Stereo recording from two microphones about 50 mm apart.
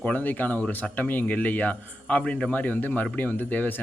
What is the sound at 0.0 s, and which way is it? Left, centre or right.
Speech, left.